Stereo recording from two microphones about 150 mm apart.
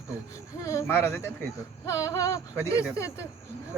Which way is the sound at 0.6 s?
20° left (ahead or behind).